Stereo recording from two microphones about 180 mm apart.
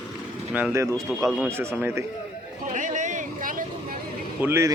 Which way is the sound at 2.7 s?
45° right (ahead or behind).